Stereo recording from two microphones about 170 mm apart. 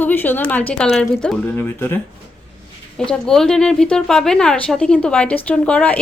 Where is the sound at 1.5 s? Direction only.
10° left (ahead or behind).